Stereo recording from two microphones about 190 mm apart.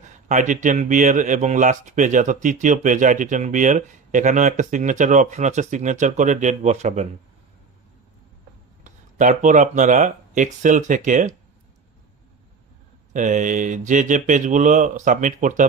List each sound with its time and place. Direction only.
0.3 s speech: 40° right (ahead or behind)
8.8 s speech: 40° right (ahead or behind)
13.1 s speech: 40° right (ahead or behind)